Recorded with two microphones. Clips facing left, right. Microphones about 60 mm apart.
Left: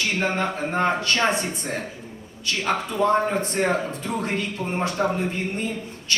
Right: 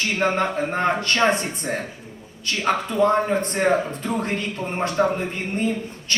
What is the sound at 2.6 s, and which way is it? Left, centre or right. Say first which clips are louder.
A man's voice: right 2 dB; right.